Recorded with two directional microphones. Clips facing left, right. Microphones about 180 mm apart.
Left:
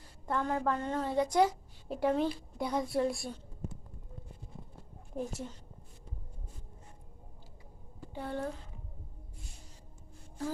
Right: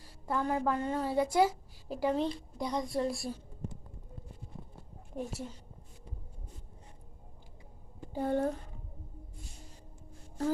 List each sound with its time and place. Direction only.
0.3 s a woman's voice: 10° right (ahead or behind)
5.1 s a woman's voice: centre (ahead or behind)
8.1 s speech: 45° right (ahead or behind)